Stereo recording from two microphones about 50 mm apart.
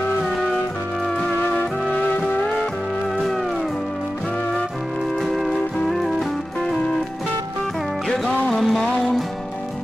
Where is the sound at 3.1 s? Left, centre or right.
Centre.